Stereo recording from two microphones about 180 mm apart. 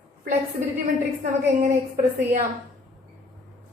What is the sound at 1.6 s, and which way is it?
Speech, 45° right (ahead or behind).